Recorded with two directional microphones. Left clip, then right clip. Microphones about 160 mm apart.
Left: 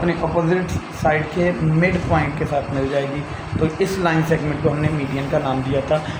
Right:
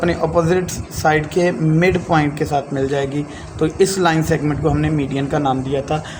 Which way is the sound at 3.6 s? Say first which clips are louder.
Right 4 dB; 50° right (ahead or behind).